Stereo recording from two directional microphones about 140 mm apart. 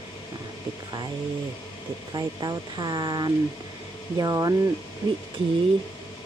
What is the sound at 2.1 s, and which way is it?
Speech, 30° right (ahead or behind).